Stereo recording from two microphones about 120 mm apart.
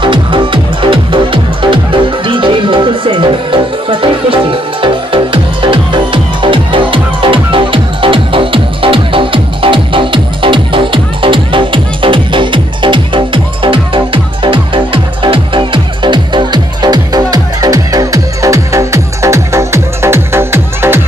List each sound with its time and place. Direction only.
0.0 s music: 45° right (ahead or behind); by 21.0 s 20° right (ahead or behind)